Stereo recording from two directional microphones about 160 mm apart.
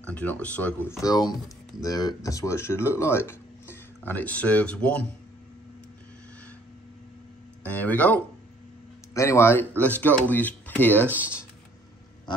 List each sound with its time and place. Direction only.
0.0 s speech: 10° left (ahead or behind)
7.6 s speech: 10° left (ahead or behind)